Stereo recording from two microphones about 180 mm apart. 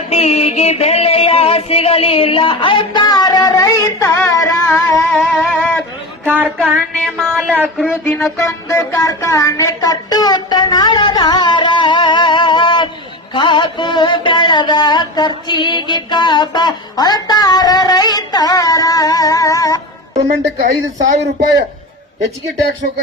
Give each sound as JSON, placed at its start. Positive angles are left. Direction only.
{"t": 0.1, "sound": "music", "side_deg": 35}
{"t": 5.3, "sound": "music", "side_deg": 5}
{"t": 6.2, "sound": "a sound", "side_deg": -10}
{"t": 6.7, "sound": "music", "side_deg": -10}
{"t": 7.2, "sound": "speech", "side_deg": -5}
{"t": 8.0, "sound": "mantra", "side_deg": 10}
{"t": 20.2, "sound": "a man's voice", "side_deg": -70}